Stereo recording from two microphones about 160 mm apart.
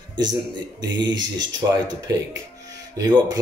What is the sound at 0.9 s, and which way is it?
Speech, 25° right (ahead or behind).